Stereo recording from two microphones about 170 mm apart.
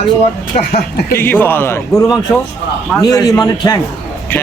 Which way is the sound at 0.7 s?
60° left (ahead or behind).